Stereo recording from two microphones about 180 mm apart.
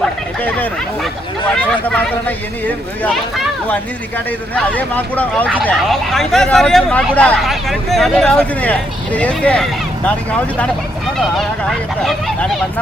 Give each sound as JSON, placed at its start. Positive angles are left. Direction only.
{"t": 0.0, "sound": "a sound", "side_deg": 10}
{"t": 1.9, "sound": "speech", "side_deg": 10}
{"t": 11.2, "sound": "speech", "side_deg": 0}